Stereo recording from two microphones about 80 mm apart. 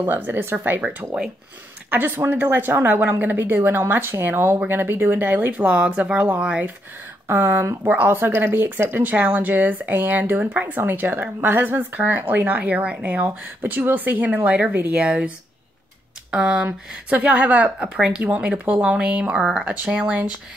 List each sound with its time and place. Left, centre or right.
0.0 s speech: right; by 18.2 s centre
18.2 s speech: centre